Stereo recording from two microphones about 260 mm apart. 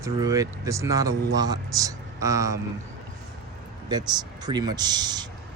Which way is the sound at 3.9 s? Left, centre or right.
Centre.